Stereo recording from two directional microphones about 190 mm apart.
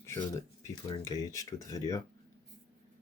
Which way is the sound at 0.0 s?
15° left (ahead or behind).